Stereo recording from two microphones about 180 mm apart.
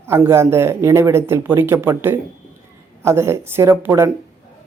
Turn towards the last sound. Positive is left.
turn(degrees=-15)  # may be behind; listen again after turning